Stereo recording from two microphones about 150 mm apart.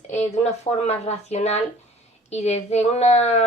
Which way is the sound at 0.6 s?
45° left (ahead or behind).